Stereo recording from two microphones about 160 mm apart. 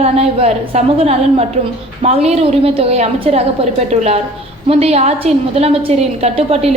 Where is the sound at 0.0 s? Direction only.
40° right (ahead or behind).